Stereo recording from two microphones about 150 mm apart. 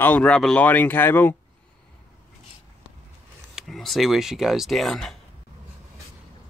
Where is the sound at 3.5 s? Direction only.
Centre (ahead or behind).